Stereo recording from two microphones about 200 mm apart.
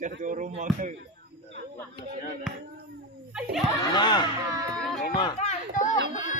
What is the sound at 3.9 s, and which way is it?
Speech, 20° left (ahead or behind).